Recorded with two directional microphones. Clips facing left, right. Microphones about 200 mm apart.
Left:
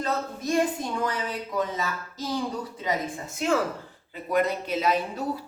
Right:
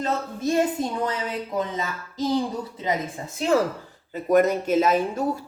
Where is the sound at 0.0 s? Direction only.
25° right (ahead or behind).